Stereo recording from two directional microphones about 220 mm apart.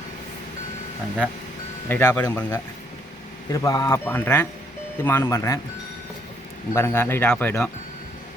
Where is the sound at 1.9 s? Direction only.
10° left (ahead or behind).